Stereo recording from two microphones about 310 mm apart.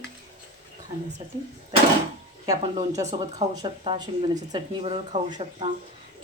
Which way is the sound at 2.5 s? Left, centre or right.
Centre.